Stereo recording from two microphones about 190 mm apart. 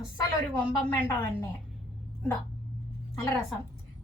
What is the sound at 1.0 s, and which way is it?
Speech, 15° left (ahead or behind).